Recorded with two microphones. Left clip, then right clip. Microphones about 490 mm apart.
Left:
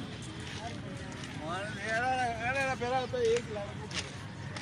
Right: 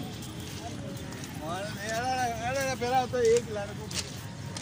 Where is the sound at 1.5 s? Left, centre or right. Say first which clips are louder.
Right 1 dB; left.